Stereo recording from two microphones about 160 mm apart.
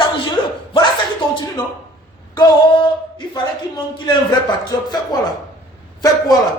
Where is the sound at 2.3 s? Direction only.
25° left (ahead or behind).